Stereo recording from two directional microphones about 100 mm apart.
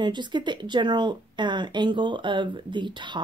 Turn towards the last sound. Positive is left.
turn(degrees=-50)  # may be behind; listen again after turning